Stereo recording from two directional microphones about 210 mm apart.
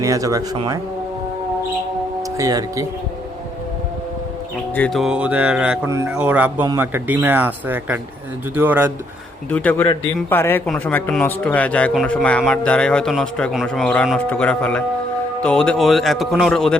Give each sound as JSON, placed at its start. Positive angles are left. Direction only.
{"t": 0.0, "sound": "speech", "side_deg": -15}
{"t": 2.4, "sound": "speech", "side_deg": -15}
{"t": 4.7, "sound": "speech", "side_deg": 5}
{"t": 9.5, "sound": "speech", "side_deg": 5}